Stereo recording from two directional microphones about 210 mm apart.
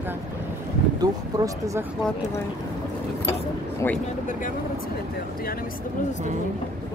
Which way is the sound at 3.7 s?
10° left (ahead or behind).